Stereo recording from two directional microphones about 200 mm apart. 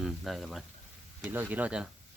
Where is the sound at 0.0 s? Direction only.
Centre (ahead or behind).